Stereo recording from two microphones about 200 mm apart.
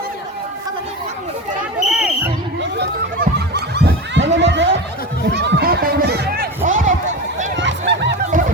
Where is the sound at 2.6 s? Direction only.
55° right (ahead or behind); by 6.9 s 40° right (ahead or behind).